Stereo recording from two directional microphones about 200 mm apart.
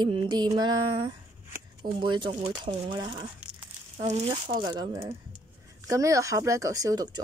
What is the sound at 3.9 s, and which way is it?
Speech, 35° right (ahead or behind).